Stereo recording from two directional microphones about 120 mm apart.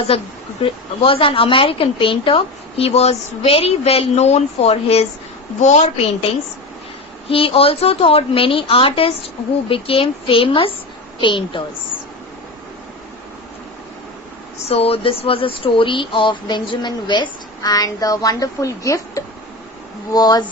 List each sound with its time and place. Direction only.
0.6 s a woman's voice: 50° left (ahead or behind)
5.5 s a woman's voice: 70° left (ahead or behind)
7.3 s a woman's voice: 50° left (ahead or behind)
14.7 s speech: 55° left (ahead or behind); by 20.4 s 35° left (ahead or behind)